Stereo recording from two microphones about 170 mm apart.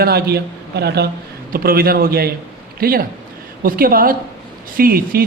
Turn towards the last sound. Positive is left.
turn(degrees=-60)  # may be behind; listen again after turning